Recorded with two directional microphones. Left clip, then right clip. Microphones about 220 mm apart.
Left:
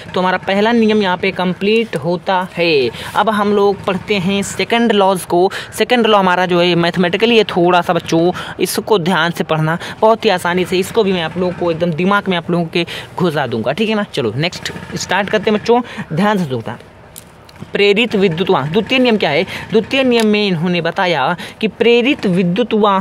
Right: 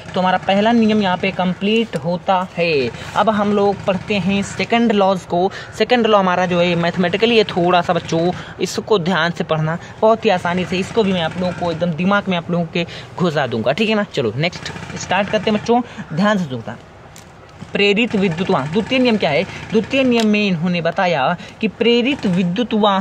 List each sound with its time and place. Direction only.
0.1 s speech: 50° left (ahead or behind)
10.0 s speech: 55° left (ahead or behind)
13.2 s speech: 20° left (ahead or behind)
15.0 s speech: 50° left (ahead or behind)
17.7 s speech: 50° left (ahead or behind)